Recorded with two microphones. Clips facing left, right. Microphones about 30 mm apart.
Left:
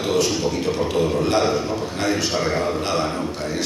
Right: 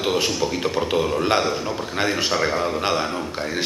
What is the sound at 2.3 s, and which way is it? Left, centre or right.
Speech, centre.